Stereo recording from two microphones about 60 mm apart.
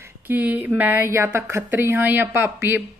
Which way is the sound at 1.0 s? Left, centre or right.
Right.